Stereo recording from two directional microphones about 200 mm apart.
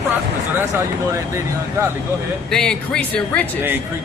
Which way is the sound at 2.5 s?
5° left (ahead or behind).